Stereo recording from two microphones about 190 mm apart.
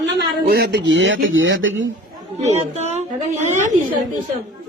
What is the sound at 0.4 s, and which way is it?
Speech, 55° right (ahead or behind).